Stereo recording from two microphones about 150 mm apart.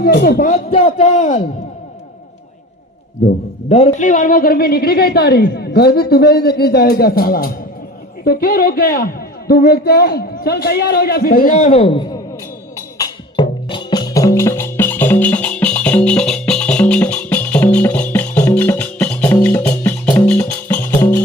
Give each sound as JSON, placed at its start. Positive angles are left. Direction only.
{"t": 0.0, "sound": "a man's voice", "side_deg": 80}
{"t": 0.5, "sound": "a man's voice", "side_deg": 45}
{"t": 3.7, "sound": "a man's voice", "side_deg": 45}
{"t": 11.9, "sound": "speech", "side_deg": 25}
{"t": 13.0, "sound": "music", "side_deg": 35}